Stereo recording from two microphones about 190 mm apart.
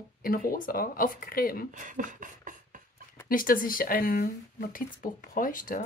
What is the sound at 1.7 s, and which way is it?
Beatboxing, 40° right (ahead or behind).